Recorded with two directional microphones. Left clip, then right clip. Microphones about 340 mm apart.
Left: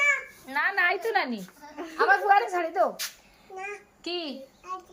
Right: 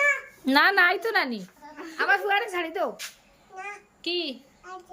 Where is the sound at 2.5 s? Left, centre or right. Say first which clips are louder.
Left 3 dB; centre.